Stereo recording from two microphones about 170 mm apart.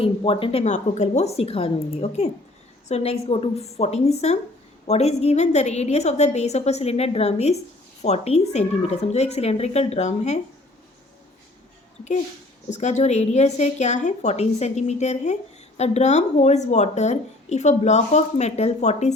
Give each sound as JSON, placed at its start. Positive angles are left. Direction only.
{"t": 0.0, "sound": "a woman's voice", "side_deg": 35}
{"t": 12.7, "sound": "a woman's voice", "side_deg": 45}